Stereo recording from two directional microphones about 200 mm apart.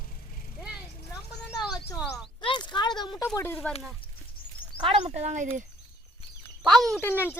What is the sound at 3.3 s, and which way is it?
Speech, 10° left (ahead or behind).